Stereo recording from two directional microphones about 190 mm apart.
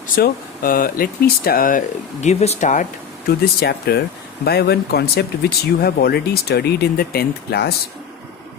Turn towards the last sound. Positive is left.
turn(degrees=55)  # may be behind; listen again after turning